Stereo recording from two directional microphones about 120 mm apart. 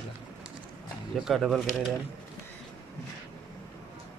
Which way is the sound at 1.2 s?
Centre (ahead or behind).